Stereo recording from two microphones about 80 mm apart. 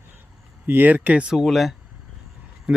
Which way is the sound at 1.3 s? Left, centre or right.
Centre.